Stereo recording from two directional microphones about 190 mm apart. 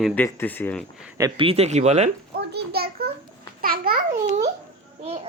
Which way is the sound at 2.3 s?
55° right (ahead or behind).